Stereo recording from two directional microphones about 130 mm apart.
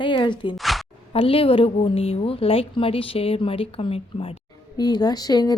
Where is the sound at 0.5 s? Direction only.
Centre (ahead or behind).